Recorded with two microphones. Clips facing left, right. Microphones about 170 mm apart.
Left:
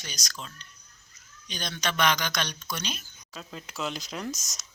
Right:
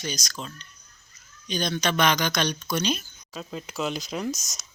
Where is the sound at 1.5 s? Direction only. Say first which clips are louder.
Right 7 dB; 25° right (ahead or behind).